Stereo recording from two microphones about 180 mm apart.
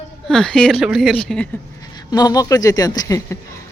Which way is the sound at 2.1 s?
20° left (ahead or behind).